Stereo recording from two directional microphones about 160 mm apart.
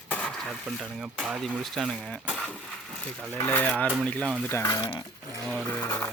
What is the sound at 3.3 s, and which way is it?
Speech, 15° left (ahead or behind).